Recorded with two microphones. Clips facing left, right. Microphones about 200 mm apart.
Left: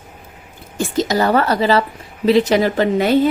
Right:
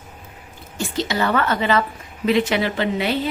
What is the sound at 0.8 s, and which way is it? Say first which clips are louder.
A woman's voice: left 5 dB; 45° left (ahead or behind).